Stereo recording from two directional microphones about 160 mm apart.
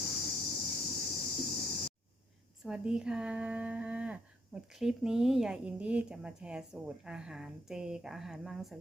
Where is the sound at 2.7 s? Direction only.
5° right (ahead or behind).